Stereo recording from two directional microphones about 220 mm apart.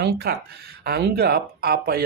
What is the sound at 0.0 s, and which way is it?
Speech, 45° right (ahead or behind).